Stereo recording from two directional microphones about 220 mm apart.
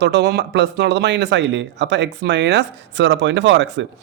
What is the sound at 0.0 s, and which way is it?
Speech, 50° right (ahead or behind).